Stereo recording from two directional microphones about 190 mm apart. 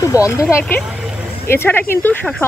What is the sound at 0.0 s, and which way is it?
Speech, 15° left (ahead or behind).